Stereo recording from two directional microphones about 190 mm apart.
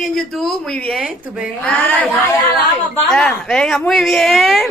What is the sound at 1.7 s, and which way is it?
A woman's voice, 10° left (ahead or behind).